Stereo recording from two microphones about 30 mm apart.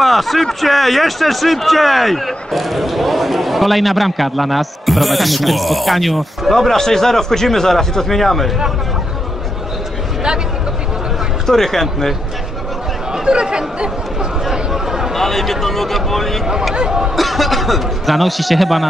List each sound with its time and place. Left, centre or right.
0.0 s a sound: centre
0.6 s speech: centre
6.8 s speech: centre
11.4 s speech: centre
13.1 s speech: right
14.7 s a sound: centre
15.1 s speech: centre
16.7 s speech: right
17.1 s speech: centre